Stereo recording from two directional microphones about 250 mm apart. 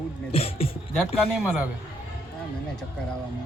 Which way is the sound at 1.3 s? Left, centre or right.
Centre.